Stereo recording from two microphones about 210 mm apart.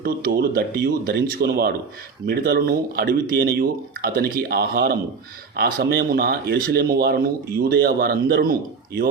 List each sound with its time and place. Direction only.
0.0 s speech: 45° right (ahead or behind)